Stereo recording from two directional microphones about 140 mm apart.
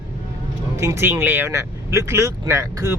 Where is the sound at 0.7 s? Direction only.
20° right (ahead or behind).